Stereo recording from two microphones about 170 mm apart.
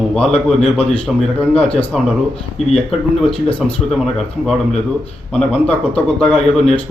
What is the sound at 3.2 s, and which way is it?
Speech, 5° left (ahead or behind).